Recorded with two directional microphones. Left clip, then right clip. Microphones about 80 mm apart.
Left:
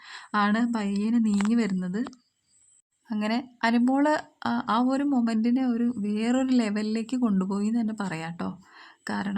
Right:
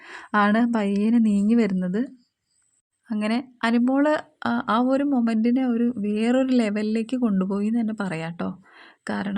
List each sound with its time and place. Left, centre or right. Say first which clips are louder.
0.0 s a woman's voice: right 4 dB; right
3.1 s speech: right 3 dB; right
4.4 s speech: right 3 dB; right